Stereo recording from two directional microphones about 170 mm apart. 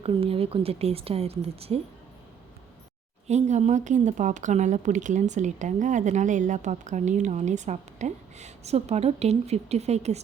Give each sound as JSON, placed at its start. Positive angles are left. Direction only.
{"t": 0.0, "sound": "speech", "side_deg": -35}
{"t": 3.2, "sound": "speech", "side_deg": -40}